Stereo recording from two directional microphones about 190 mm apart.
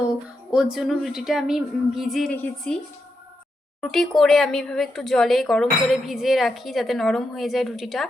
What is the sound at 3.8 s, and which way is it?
A woman's voice, centre (ahead or behind).